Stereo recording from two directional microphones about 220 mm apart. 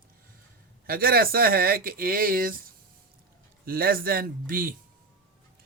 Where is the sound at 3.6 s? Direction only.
40° right (ahead or behind).